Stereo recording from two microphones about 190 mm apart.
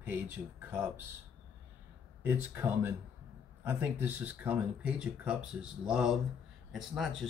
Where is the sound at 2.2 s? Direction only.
10° right (ahead or behind).